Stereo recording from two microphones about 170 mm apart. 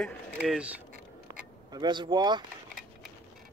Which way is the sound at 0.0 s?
5° right (ahead or behind).